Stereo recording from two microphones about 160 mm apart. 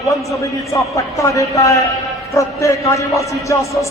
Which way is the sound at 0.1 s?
20° left (ahead or behind).